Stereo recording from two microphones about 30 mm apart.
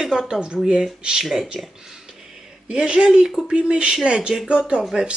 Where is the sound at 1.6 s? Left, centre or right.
Centre.